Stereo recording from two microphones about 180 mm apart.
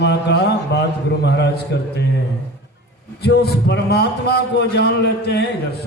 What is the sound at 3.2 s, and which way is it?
A man's voice, 65° left (ahead or behind).